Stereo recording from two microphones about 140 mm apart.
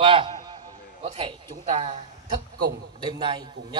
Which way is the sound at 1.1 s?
35° right (ahead or behind).